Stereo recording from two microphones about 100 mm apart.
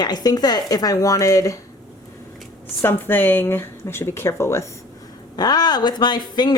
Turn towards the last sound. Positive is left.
turn(degrees=45)  # may be behind; listen again after turning